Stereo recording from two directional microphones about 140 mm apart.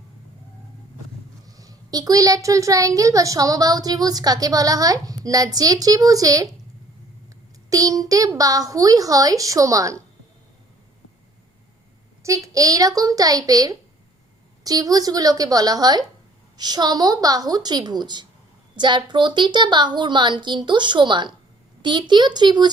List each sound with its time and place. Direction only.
1.5 s a child's voice: 25° right (ahead or behind)
7.7 s a child's voice: 25° right (ahead or behind)
12.2 s a child's voice: 25° right (ahead or behind)